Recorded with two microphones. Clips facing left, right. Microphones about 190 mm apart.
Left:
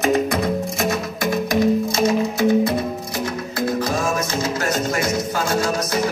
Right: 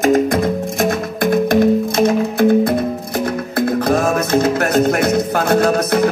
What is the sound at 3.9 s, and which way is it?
Music, 60° right (ahead or behind).